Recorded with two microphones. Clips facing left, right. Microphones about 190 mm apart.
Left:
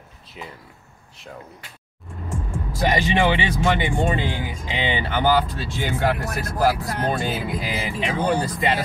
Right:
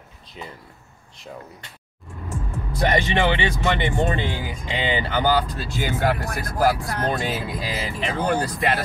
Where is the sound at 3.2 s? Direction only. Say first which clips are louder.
Left 1 dB; 10° left (ahead or behind).